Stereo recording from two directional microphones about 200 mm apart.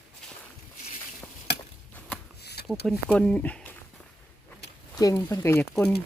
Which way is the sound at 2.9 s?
5° left (ahead or behind).